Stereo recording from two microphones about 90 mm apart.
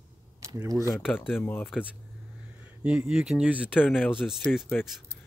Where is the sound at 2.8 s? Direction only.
10° right (ahead or behind).